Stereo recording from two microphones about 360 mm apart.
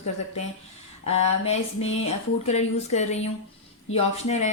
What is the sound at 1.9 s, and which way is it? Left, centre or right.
A woman's voice, centre.